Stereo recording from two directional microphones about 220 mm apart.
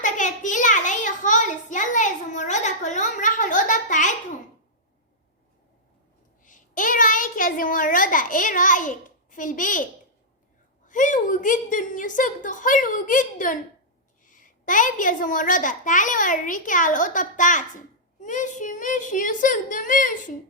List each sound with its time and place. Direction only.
0.0 s a sound: 35° left (ahead or behind)
6.4 s a child's voice: 35° left (ahead or behind)
10.8 s a child's voice: 35° left (ahead or behind)